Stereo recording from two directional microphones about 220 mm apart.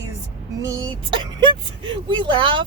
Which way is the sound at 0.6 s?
15° right (ahead or behind).